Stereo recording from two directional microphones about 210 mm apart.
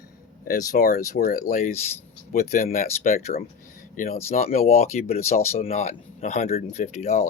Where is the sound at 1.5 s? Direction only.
35° left (ahead or behind).